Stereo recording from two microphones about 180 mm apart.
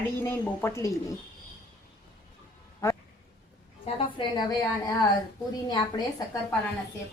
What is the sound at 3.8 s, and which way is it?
A woman's voice, 25° left (ahead or behind).